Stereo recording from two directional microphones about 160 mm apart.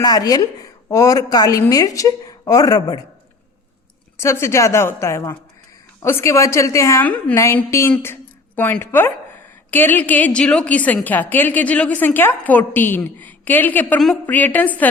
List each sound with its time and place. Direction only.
0.0 s a woman's voice: 25° left (ahead or behind)
4.2 s a woman's voice: 15° left (ahead or behind)